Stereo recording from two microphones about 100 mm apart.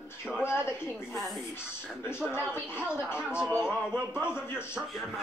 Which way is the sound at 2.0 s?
25° left (ahead or behind).